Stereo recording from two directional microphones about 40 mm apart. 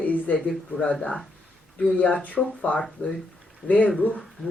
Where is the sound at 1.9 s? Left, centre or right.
Left.